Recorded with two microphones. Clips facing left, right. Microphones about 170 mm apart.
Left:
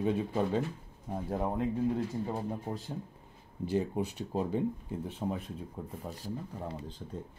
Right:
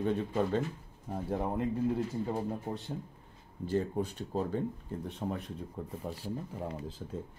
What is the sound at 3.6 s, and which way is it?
Speech, 10° left (ahead or behind).